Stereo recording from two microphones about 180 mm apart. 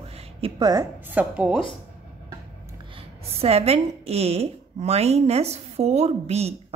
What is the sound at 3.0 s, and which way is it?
A woman's voice, 35° right (ahead or behind).